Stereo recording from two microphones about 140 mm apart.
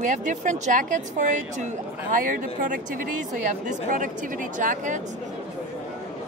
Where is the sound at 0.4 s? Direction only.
65° right (ahead or behind).